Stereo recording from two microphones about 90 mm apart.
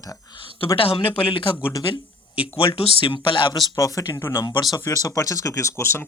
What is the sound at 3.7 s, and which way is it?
Speech, 35° left (ahead or behind).